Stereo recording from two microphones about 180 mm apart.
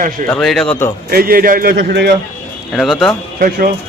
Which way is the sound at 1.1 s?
55° right (ahead or behind).